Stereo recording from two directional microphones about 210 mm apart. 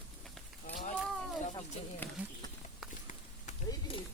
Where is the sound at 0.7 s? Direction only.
35° left (ahead or behind).